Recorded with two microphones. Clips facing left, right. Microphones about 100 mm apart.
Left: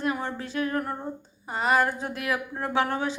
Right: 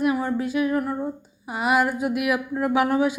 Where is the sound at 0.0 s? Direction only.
10° right (ahead or behind).